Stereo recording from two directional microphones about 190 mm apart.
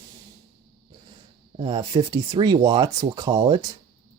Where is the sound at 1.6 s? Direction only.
20° right (ahead or behind).